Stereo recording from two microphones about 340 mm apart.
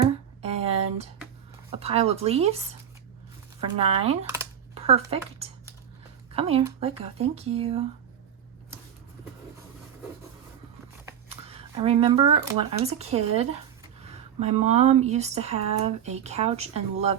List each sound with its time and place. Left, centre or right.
0.0 s a sound: centre
1.7 s speech: centre
3.6 s speech: centre
6.3 s speech: centre
11.0 s speech: centre